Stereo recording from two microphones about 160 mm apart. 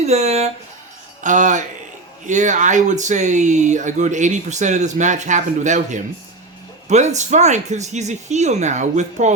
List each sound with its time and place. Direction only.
0.0 s speech: 40° right (ahead or behind)